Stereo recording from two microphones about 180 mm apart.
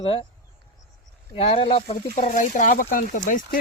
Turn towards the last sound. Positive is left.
turn(degrees=45)  # may be behind; listen again after turning